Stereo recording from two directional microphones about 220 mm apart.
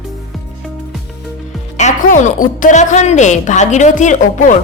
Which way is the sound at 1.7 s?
35° left (ahead or behind).